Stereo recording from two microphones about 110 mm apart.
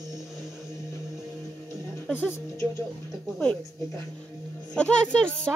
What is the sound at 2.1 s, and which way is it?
Speech, 20° left (ahead or behind).